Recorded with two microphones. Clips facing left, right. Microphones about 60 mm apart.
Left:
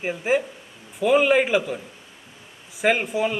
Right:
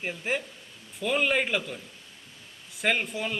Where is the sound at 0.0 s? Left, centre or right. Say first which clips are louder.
Left 8 dB; centre.